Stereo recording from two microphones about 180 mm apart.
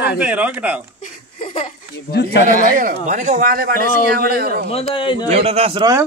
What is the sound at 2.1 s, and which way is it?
Speech, 65° left (ahead or behind).